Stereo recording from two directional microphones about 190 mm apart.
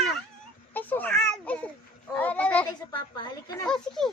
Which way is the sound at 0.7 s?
10° left (ahead or behind).